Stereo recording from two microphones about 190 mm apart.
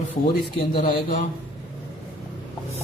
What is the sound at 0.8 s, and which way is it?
Speech, 40° left (ahead or behind).